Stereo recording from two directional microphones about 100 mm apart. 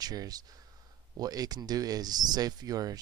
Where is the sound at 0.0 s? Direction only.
40° right (ahead or behind).